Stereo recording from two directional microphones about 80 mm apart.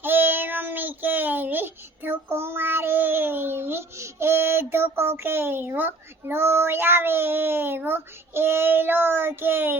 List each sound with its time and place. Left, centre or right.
0.0 s child singing: right